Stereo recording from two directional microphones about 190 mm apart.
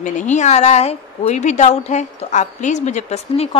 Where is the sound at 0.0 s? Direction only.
40° left (ahead or behind).